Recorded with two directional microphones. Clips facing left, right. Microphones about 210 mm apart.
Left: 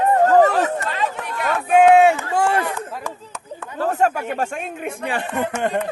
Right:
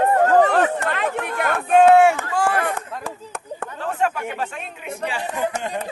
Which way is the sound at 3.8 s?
40° left (ahead or behind).